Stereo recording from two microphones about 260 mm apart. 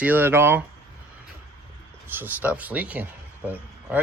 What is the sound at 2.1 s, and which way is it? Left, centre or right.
Speech, centre.